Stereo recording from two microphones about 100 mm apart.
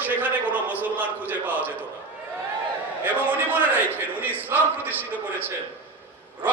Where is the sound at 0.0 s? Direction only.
15° right (ahead or behind).